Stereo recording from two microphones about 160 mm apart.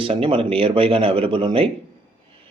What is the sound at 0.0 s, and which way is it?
Speech, 35° right (ahead or behind).